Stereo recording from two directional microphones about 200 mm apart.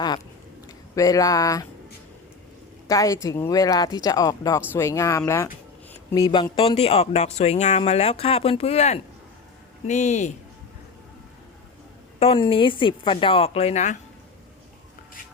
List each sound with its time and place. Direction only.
0.9 s speech: 15° left (ahead or behind)
2.8 s a woman's voice: 15° left (ahead or behind); by 10.3 s 35° left (ahead or behind)
12.2 s speech: 25° left (ahead or behind)